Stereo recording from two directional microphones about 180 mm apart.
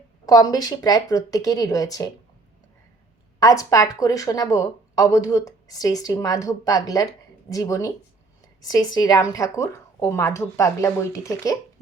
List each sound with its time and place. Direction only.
0.3 s speech: 20° left (ahead or behind)
3.4 s a woman's voice: 20° left (ahead or behind)